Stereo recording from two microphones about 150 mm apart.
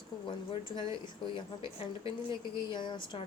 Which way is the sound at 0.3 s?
35° left (ahead or behind).